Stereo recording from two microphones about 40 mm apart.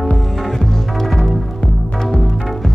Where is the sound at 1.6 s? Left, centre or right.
Centre.